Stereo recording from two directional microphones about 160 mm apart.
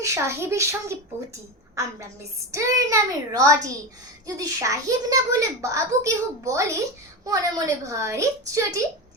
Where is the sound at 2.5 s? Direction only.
20° right (ahead or behind).